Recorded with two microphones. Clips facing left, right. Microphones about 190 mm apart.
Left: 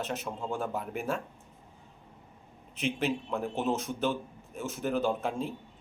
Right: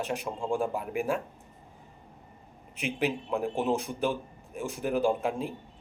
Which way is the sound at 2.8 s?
15° right (ahead or behind).